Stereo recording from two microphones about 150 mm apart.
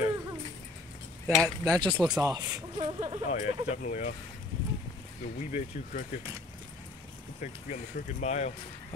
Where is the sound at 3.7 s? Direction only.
55° left (ahead or behind).